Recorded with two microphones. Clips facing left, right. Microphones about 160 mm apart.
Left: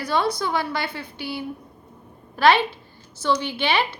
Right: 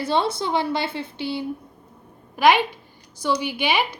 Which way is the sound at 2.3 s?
15° right (ahead or behind).